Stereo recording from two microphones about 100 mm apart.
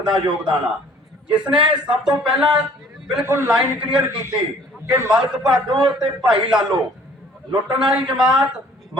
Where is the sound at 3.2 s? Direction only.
25° right (ahead or behind).